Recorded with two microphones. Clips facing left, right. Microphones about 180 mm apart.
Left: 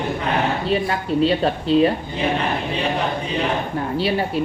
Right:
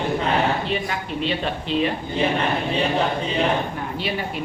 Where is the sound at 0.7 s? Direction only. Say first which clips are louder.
Left 6 dB; 40° left (ahead or behind).